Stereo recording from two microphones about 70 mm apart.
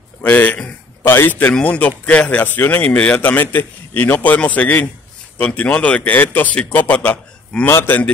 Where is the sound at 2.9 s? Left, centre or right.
Centre.